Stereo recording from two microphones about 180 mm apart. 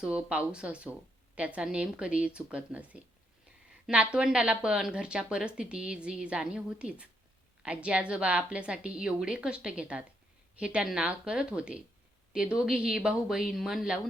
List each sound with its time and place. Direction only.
0.0 s a woman's voice: 5° right (ahead or behind)